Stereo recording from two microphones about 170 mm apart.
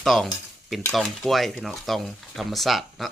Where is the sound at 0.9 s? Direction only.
Centre (ahead or behind).